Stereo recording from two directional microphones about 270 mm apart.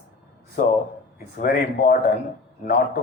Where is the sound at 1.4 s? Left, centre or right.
Left.